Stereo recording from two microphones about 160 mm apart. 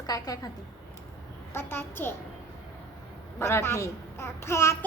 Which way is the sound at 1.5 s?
15° left (ahead or behind).